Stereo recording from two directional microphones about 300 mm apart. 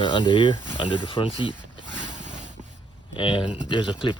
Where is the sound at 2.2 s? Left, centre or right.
Right.